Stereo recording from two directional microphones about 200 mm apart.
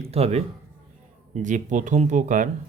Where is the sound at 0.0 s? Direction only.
30° right (ahead or behind).